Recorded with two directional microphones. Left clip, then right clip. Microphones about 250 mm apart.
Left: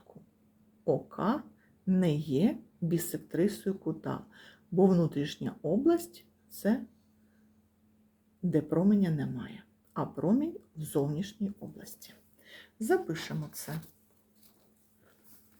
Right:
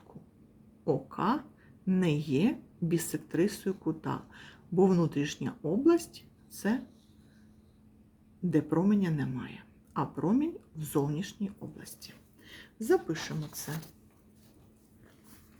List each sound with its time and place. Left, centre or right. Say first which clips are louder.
0.9 s speech: even; centre
8.4 s speech: even; centre